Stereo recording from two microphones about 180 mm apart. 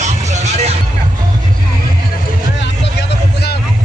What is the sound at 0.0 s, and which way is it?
Vehicle, 40° right (ahead or behind).